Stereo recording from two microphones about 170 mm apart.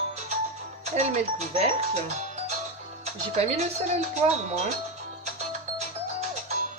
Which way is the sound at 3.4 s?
40° right (ahead or behind).